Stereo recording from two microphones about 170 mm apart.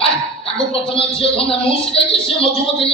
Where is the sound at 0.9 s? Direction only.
30° left (ahead or behind).